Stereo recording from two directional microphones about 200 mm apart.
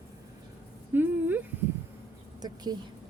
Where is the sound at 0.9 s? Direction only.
10° right (ahead or behind).